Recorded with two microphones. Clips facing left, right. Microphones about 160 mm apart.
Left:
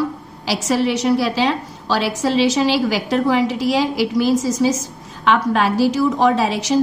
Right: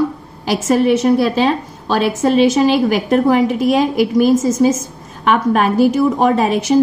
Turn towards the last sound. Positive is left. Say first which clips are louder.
# right 3 dB
turn(degrees=-50)  # may be behind; listen again after turning